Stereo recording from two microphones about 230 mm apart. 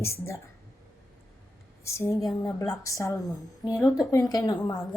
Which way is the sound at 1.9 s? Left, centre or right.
Centre.